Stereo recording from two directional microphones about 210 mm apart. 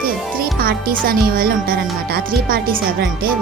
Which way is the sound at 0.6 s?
45° right (ahead or behind).